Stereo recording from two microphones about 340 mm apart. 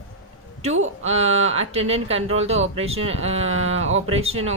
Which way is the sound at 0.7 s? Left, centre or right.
Right.